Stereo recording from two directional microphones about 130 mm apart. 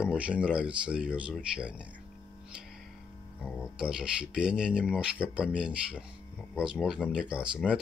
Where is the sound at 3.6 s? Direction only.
5° right (ahead or behind).